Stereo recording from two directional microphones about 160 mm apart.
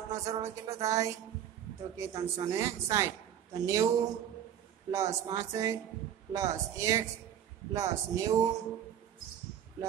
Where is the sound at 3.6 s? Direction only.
20° right (ahead or behind).